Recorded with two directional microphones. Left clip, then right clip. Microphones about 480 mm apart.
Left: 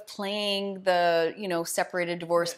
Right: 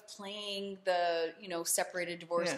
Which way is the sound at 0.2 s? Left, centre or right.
Left.